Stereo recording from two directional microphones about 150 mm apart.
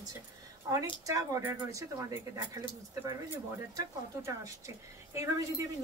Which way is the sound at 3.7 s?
20° right (ahead or behind).